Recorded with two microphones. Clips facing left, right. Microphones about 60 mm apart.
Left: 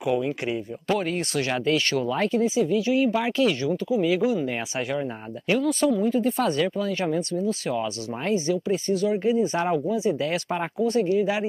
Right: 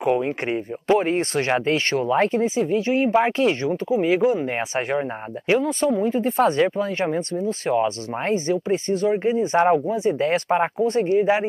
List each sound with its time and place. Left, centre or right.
0.0 s speech: right